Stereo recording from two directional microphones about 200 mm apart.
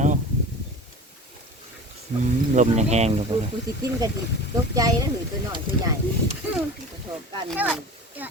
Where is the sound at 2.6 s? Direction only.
35° right (ahead or behind).